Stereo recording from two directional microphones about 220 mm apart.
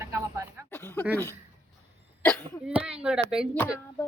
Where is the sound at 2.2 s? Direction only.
Centre (ahead or behind).